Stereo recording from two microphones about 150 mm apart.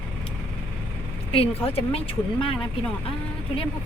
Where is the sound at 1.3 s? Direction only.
40° left (ahead or behind).